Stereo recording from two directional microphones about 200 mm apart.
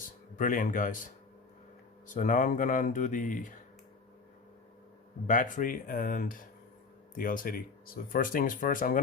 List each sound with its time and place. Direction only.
0.3 s speech: 40° left (ahead or behind)
2.1 s speech: 40° left (ahead or behind)
5.2 s speech: 40° left (ahead or behind)